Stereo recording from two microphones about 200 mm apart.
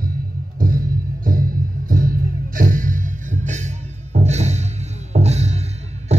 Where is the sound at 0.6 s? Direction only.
45° right (ahead or behind).